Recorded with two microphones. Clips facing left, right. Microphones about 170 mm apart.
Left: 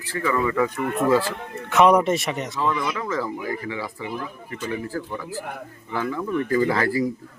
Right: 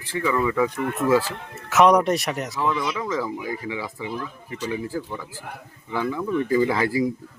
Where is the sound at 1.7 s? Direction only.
Centre (ahead or behind).